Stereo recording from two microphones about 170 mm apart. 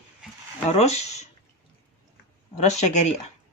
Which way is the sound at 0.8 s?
40° left (ahead or behind).